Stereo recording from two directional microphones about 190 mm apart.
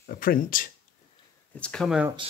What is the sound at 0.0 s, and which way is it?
Speech, 50° left (ahead or behind).